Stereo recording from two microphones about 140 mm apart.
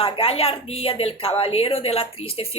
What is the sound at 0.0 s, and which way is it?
Speech, 45° left (ahead or behind).